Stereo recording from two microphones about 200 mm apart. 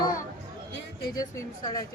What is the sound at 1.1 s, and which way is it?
Speech, 20° left (ahead or behind).